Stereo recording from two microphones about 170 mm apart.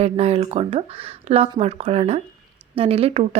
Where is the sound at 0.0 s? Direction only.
35° right (ahead or behind).